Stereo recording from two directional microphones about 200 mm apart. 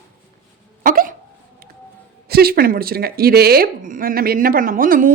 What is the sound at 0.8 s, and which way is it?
Hiccup, 45° right (ahead or behind).